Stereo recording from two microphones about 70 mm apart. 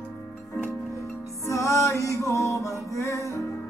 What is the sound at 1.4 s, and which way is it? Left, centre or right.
Music, left.